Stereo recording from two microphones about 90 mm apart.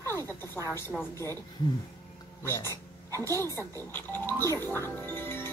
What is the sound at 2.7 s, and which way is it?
Speech, 40° right (ahead or behind).